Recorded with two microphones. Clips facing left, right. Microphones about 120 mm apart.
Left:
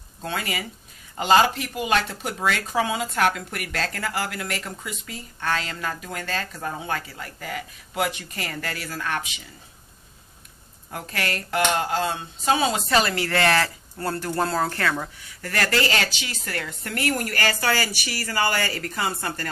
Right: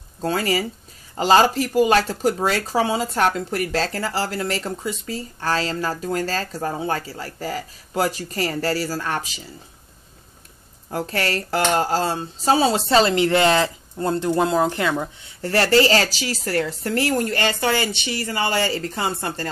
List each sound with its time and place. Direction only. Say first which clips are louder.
0.2 s speech: right 8 dB; 35° right (ahead or behind)
10.9 s speech: right 6 dB; 35° right (ahead or behind)